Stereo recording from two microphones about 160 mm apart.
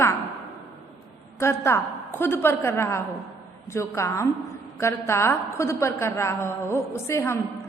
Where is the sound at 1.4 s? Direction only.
15° left (ahead or behind).